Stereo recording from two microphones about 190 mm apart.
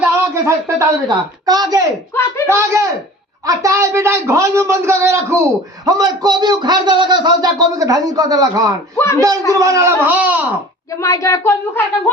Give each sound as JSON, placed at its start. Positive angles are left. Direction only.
{"t": 0.0, "sound": "a woman's voice", "side_deg": -15}
{"t": 2.1, "sound": "speech", "side_deg": 10}
{"t": 2.5, "sound": "a man's voice", "side_deg": -15}
{"t": 9.0, "sound": "speech", "side_deg": 15}
{"t": 9.6, "sound": "a man's voice", "side_deg": -15}
{"t": 11.0, "sound": "speech", "side_deg": 15}